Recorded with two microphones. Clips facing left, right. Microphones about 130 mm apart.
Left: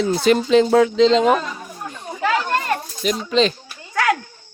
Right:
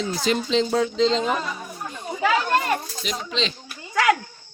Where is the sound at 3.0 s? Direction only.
50° left (ahead or behind).